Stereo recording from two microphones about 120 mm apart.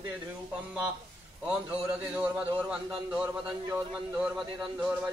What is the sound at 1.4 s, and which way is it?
A man's voice, 10° right (ahead or behind).